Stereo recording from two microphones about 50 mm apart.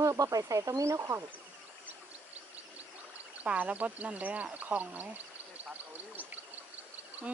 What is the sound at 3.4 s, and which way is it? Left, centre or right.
Speech, right.